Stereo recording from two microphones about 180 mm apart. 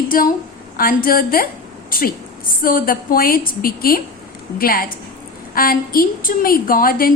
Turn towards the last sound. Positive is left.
turn(degrees=55)  # may be behind; listen again after turning